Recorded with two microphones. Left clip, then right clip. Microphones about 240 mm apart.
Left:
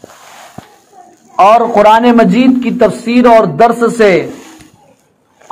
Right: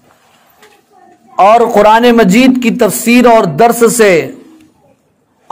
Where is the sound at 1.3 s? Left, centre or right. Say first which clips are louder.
Even; right.